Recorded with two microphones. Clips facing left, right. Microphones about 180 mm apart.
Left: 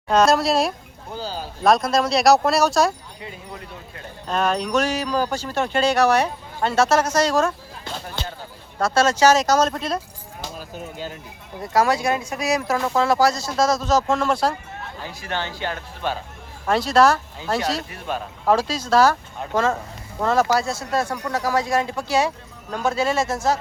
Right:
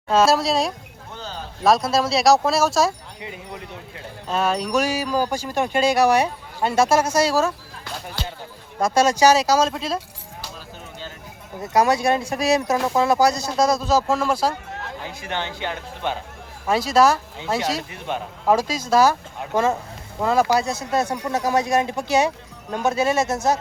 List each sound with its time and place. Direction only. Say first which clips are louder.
0.1 s speech: left 1 dB; 5° right (ahead or behind)
1.1 s speech: left 4 dB; 35° left (ahead or behind)
1.6 s speech: even; 5° right (ahead or behind)
3.2 s wind chime: right 1 dB; 15° right (ahead or behind)
4.3 s wind chime: even; 5° right (ahead or behind)
8.8 s wind chime: right 1 dB; 10° right (ahead or behind)
11.7 s wind chime: right 1 dB; 20° right (ahead or behind); by 14.6 s centre (ahead or behind)
14.7 s chatter: right 2 dB; 90° right
15.0 s wind chime: left 1 dB; 15° right (ahead or behind)
16.9 s speech: even; 5° right (ahead or behind)
17.6 s wind chime: even; 20° right (ahead or behind)
20.1 s speech: even; 10° right (ahead or behind)